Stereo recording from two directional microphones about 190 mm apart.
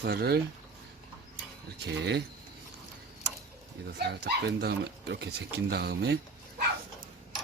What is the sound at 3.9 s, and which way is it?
Speech, 65° right (ahead or behind).